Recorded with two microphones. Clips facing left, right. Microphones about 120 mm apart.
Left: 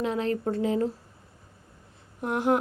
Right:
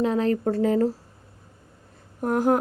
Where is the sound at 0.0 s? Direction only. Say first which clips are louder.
Right 5 dB; 35° right (ahead or behind).